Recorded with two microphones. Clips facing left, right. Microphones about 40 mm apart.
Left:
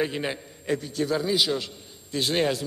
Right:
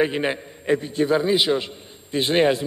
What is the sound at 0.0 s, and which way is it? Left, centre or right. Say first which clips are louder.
A man's voice: right 6 dB; right.